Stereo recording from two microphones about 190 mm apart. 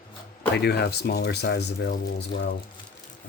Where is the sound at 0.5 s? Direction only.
60° left (ahead or behind).